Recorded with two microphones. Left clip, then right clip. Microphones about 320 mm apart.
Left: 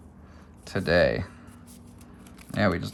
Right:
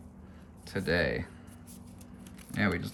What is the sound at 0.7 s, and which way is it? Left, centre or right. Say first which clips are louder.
Speech: left 7 dB; centre.